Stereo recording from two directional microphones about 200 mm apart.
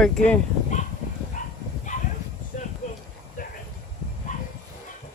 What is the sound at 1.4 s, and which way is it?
Bow-wow, 40° left (ahead or behind).